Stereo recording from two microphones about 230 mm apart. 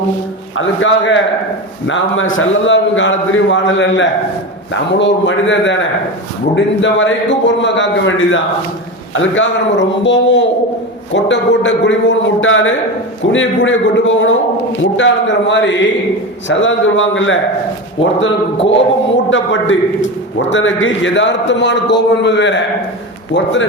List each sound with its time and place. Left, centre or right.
0.5 s a man's voice: left
19.3 s a man's voice: left